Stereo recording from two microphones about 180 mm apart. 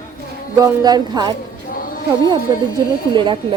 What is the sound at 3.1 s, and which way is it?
Speech, 25° right (ahead or behind).